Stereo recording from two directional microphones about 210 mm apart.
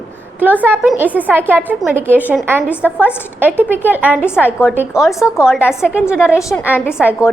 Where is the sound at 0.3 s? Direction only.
10° right (ahead or behind).